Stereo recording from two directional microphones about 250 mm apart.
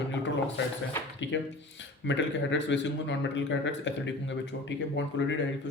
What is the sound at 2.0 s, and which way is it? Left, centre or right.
A man's voice, left.